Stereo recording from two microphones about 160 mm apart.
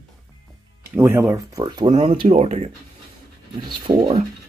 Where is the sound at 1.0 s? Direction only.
15° right (ahead or behind).